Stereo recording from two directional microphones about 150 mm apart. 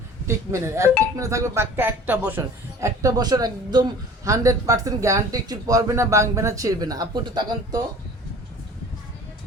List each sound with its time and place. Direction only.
0.3 s a man's voice: 20° right (ahead or behind)
2.8 s a man's voice: 25° right (ahead or behind)